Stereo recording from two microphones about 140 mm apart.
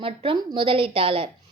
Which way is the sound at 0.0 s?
40° right (ahead or behind).